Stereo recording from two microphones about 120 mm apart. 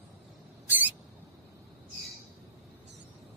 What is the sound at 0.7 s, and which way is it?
Rodents, 15° right (ahead or behind).